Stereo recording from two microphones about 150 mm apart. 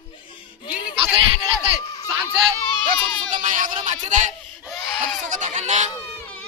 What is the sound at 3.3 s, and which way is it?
Speech, 60° right (ahead or behind).